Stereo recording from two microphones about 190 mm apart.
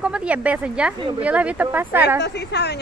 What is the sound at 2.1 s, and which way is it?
Speech, 60° left (ahead or behind).